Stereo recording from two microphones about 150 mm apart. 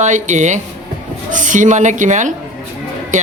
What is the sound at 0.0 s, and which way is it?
A woman's voice, 55° right (ahead or behind).